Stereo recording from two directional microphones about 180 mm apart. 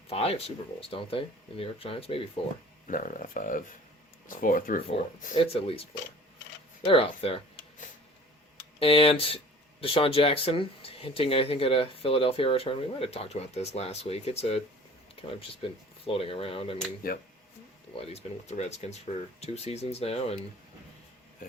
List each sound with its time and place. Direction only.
0.1 s speech: 35° left (ahead or behind)
2.8 s speech: 45° left (ahead or behind)
4.9 s speech: 30° left (ahead or behind)
8.8 s speech: 30° left (ahead or behind)
17.0 s speech: 55° left (ahead or behind)
17.9 s speech: 35° left (ahead or behind)